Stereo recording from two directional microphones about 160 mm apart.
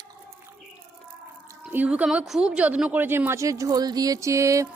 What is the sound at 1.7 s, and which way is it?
A woman's voice, 10° right (ahead or behind).